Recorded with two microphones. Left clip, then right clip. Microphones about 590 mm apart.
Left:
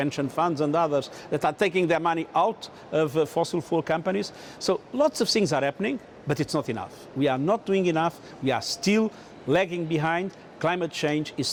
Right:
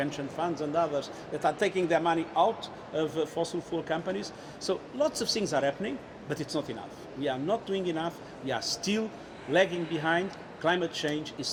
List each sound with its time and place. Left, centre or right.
0.0 s a man's voice: left
7.2 s a man's voice: left